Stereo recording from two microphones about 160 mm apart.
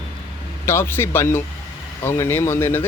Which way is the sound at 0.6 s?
15° left (ahead or behind).